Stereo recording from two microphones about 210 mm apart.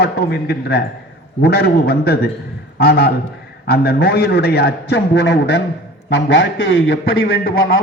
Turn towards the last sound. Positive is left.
turn(degrees=50)  # may be behind; listen again after turning